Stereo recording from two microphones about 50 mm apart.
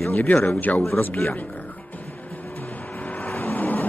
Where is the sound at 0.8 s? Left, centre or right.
Left.